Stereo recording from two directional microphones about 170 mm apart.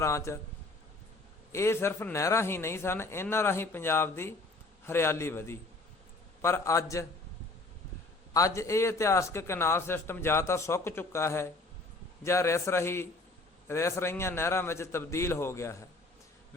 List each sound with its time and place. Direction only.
0.0 s a man's voice: 15° left (ahead or behind)
1.5 s a man's voice: 15° left (ahead or behind)
8.3 s a man's voice: 20° left (ahead or behind)